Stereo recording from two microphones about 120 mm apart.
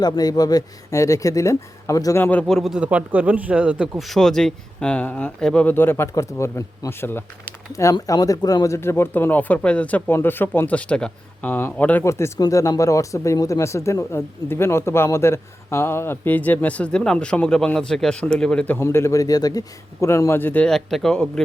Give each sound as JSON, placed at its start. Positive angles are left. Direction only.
{"t": 0.0, "sound": "speech", "side_deg": 30}
{"t": 2.5, "sound": "speech", "side_deg": 0}